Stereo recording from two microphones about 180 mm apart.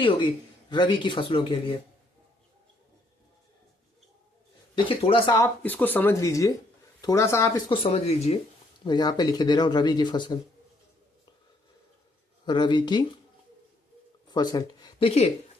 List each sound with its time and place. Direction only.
0.7 s speech: 25° left (ahead or behind)
4.7 s speech: 30° left (ahead or behind)
5.4 s speech: 10° left (ahead or behind)
7.7 s speech: 30° left (ahead or behind)
8.8 s speech: 25° left (ahead or behind)
12.5 s speech: 25° left (ahead or behind)
14.3 s speech: 20° left (ahead or behind)